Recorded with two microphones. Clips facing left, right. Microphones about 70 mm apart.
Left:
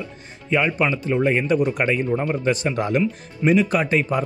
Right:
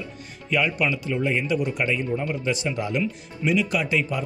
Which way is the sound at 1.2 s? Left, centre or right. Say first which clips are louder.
Left 6 dB; left.